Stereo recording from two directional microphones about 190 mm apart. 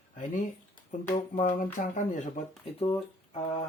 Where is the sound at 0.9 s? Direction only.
40° left (ahead or behind).